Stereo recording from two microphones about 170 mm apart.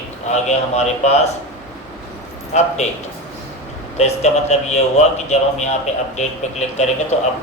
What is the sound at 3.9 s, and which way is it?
A man's voice, 40° left (ahead or behind).